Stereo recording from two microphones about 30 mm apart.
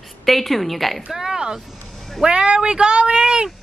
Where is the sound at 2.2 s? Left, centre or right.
Right.